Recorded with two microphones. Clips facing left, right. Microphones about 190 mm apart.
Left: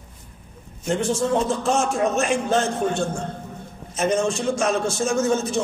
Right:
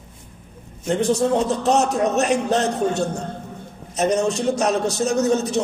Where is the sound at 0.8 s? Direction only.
35° right (ahead or behind).